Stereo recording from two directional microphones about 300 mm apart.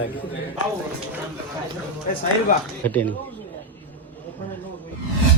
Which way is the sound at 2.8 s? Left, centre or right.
Centre.